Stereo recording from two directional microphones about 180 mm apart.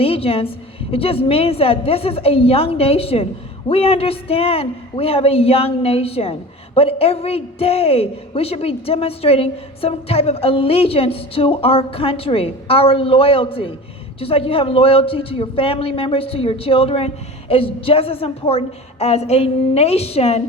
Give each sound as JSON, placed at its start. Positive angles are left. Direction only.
{"t": 0.0, "sound": "a man's voice", "side_deg": 30}